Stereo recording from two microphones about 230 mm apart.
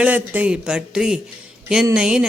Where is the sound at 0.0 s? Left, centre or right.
Centre.